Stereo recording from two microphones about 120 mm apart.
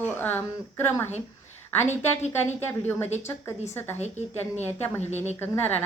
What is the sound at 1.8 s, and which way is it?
Speech, 70° left (ahead or behind).